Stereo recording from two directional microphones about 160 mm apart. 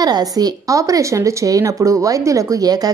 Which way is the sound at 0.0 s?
25° right (ahead or behind).